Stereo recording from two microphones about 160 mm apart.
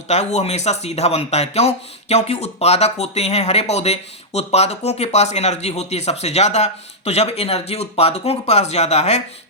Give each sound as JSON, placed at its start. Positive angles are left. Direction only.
{"t": 0.1, "sound": "speech", "side_deg": 45}